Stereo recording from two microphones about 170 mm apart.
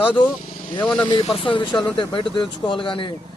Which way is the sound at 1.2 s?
30° left (ahead or behind).